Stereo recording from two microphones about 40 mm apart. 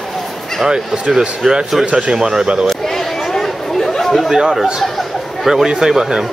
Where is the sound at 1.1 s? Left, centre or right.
Centre.